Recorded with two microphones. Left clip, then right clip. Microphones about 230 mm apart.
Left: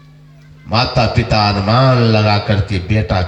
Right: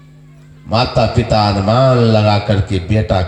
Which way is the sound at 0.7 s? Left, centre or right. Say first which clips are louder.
Right 1 dB; left.